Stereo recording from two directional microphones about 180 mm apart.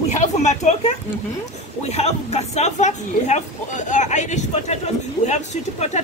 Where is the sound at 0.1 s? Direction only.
40° left (ahead or behind).